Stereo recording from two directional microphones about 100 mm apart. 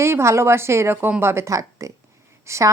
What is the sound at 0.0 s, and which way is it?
A woman's voice, 30° right (ahead or behind).